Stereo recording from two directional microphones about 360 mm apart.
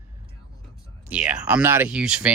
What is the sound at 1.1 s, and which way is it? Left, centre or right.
Speech, centre.